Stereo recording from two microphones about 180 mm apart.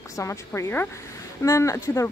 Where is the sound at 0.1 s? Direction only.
15° left (ahead or behind).